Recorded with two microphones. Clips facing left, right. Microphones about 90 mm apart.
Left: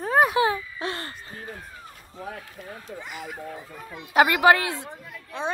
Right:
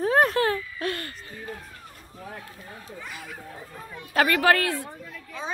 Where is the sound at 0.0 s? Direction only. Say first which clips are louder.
Even; centre (ahead or behind).